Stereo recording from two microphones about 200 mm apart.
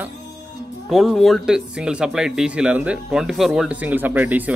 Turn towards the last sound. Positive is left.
turn(degrees=-10)  # may be behind; listen again after turning